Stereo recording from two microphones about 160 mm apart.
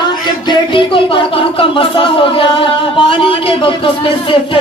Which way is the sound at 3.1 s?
35° left (ahead or behind).